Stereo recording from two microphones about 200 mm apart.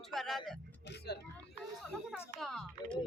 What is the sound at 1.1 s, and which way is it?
Speech, 55° left (ahead or behind).